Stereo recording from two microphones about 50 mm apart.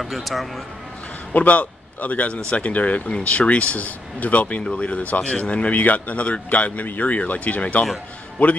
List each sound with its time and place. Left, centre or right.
0.0 s speech: centre
1.3 s speech: left